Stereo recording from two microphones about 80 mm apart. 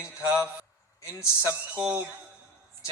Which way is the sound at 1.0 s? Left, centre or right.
Left.